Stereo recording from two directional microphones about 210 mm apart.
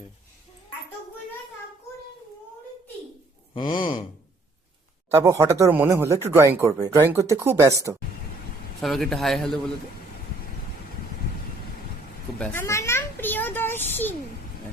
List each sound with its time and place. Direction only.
3.5 s speech: 20° left (ahead or behind)
5.1 s speech: 15° right (ahead or behind)
8.8 s speech: centre (ahead or behind)
12.4 s a sound: 10° left (ahead or behind)